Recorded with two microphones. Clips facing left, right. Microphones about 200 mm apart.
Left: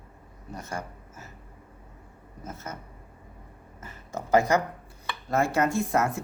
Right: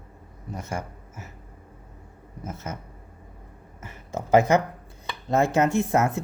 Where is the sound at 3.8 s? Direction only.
20° right (ahead or behind).